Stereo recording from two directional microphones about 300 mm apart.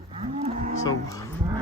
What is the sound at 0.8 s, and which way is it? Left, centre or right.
Cattle, centre.